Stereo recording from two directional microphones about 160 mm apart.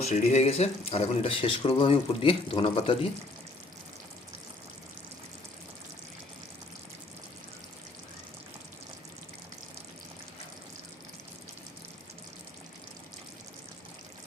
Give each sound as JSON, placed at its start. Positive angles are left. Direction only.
{"t": 0.0, "sound": "speech", "side_deg": 45}